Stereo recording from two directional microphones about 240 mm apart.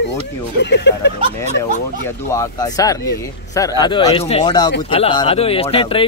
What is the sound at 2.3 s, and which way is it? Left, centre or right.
Speech, centre.